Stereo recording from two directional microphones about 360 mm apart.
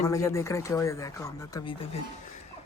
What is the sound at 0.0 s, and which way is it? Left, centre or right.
A man's voice, centre.